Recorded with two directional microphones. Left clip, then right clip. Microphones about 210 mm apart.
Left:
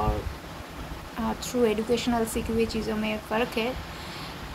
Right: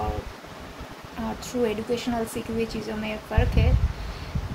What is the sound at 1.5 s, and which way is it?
Speech, 5° right (ahead or behind).